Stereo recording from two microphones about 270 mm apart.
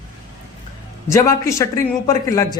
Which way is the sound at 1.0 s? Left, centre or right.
Centre.